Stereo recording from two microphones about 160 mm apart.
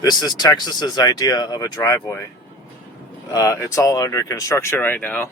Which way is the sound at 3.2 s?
20° left (ahead or behind).